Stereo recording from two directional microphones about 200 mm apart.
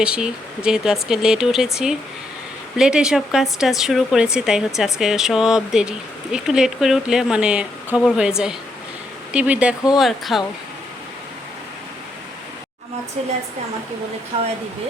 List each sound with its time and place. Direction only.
0.0 s speech: 5° right (ahead or behind)
14.3 s speech: 30° right (ahead or behind)